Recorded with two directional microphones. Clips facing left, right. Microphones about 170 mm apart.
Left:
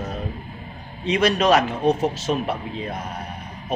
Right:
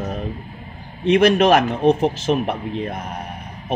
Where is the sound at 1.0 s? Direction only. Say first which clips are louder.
Right 5 dB; 55° right (ahead or behind).